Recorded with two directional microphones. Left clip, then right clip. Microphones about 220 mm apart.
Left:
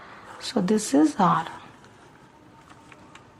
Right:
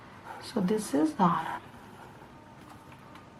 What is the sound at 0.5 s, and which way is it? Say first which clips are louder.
Speech: left 7 dB; 35° left (ahead or behind).